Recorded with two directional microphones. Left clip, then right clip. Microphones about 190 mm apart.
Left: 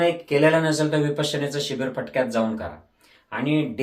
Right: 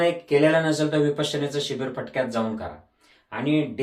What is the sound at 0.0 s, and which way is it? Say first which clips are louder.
Speech: left 1 dB; 20° left (ahead or behind).